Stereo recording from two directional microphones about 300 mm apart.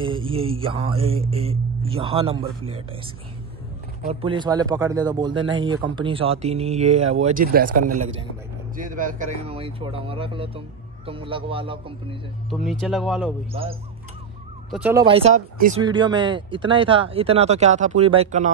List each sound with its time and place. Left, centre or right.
0.0 s speech: centre
4.0 s speech: centre
7.8 s a man's voice: right
8.7 s speech: right
12.4 s speech: centre
13.5 s speech: centre
14.7 s speech: centre
15.0 s speech: centre